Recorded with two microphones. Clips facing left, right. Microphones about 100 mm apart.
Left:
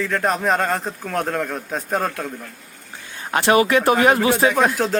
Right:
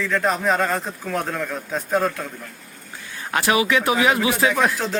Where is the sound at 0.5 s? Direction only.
40° left (ahead or behind).